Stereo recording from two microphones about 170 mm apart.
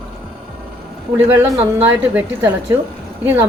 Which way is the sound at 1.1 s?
15° right (ahead or behind).